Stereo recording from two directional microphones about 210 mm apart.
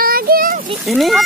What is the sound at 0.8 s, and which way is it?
Speech, centre (ahead or behind).